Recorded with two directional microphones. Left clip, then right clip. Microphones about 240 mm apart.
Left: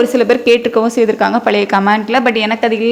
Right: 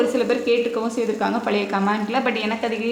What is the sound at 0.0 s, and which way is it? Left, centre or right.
A woman's voice, left.